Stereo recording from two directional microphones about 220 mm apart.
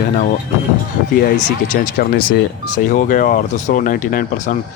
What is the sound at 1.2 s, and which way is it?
Speech, 35° left (ahead or behind).